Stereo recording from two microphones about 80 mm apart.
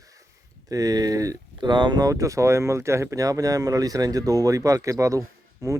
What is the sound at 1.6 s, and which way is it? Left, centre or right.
Speech, right.